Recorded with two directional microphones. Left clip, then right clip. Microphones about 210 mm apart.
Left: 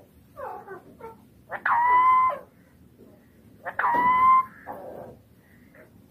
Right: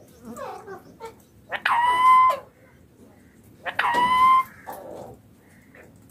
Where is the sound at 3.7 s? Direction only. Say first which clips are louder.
Right 1 dB; 15° right (ahead or behind).